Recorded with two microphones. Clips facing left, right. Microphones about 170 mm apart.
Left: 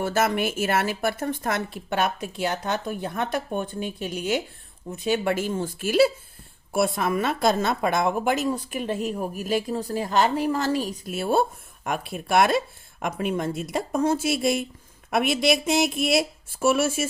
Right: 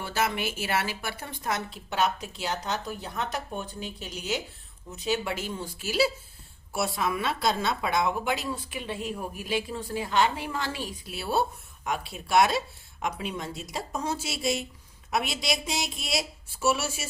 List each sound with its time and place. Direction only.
0.0 s a woman's voice: 45° left (ahead or behind)